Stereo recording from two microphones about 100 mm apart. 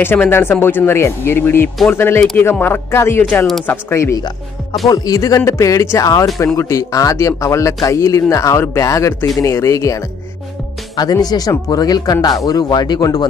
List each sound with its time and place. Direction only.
0.0 s speech: 20° left (ahead or behind)
4.8 s speech: 40° left (ahead or behind)